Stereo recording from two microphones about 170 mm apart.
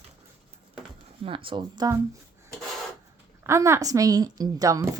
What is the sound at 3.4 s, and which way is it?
A woman's voice, 15° right (ahead or behind).